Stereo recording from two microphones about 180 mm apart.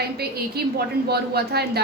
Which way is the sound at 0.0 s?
60° right (ahead or behind).